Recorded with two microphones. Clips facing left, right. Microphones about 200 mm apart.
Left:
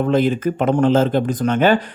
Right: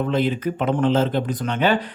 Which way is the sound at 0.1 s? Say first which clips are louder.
Left 5 dB; 45° left (ahead or behind).